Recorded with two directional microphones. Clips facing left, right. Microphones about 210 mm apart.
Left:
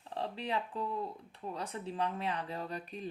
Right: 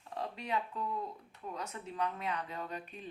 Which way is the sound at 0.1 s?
30° left (ahead or behind).